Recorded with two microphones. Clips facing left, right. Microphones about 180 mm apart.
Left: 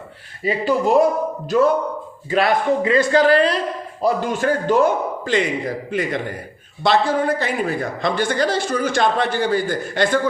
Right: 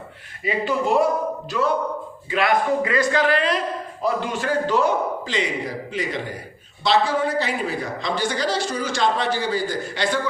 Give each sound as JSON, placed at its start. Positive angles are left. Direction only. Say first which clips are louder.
{"t": 0.4, "sound": "speech", "louder": "left 4 dB", "side_deg": 35}
{"t": 2.8, "sound": "speech", "louder": "left 5 dB", "side_deg": 25}
{"t": 4.0, "sound": "a man's voice", "louder": "left 5 dB", "side_deg": 45}